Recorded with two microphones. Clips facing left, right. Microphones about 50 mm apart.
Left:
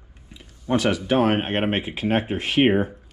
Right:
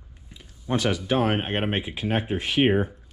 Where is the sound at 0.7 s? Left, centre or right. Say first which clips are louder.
Left 3 dB; left.